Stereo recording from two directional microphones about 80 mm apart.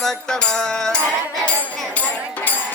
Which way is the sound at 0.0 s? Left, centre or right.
Centre.